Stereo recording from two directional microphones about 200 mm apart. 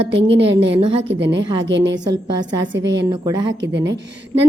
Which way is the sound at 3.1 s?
20° right (ahead or behind).